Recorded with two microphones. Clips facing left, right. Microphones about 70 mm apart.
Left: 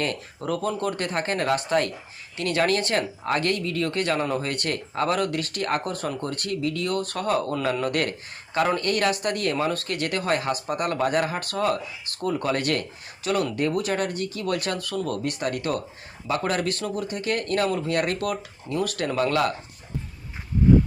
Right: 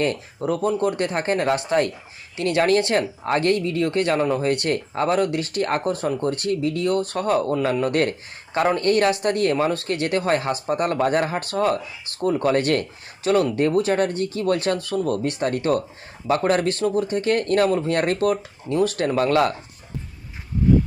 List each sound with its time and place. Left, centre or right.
0.3 s speech: right